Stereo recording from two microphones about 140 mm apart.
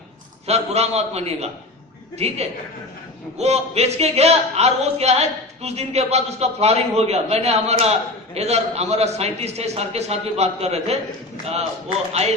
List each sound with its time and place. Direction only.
0.4 s speech: 50° right (ahead or behind)